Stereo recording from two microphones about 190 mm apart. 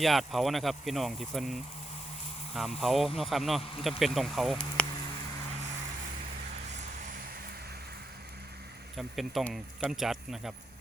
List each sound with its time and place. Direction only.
0.0 s speech: centre (ahead or behind)
9.0 s speech: centre (ahead or behind)